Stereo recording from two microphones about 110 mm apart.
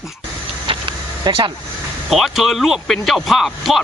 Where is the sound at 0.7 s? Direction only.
50° right (ahead or behind).